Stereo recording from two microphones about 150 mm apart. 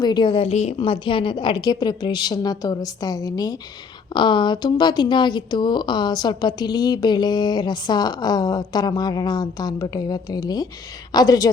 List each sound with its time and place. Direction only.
0.0 s a woman's voice: 30° left (ahead or behind)
0.4 s speech: 45° left (ahead or behind)
0.8 s a woman's voice: 35° left (ahead or behind)